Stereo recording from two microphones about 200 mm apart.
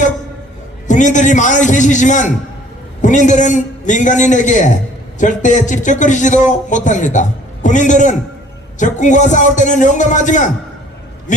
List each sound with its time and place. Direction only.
0.9 s speech: 40° left (ahead or behind)